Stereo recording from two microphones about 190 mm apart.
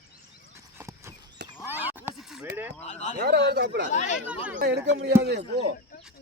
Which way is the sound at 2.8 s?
35° left (ahead or behind).